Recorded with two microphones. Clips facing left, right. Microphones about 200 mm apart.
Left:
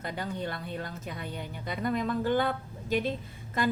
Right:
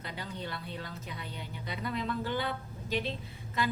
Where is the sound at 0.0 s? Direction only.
50° left (ahead or behind).